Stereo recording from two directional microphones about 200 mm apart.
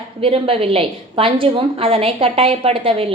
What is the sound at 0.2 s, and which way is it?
A woman's voice, 30° right (ahead or behind).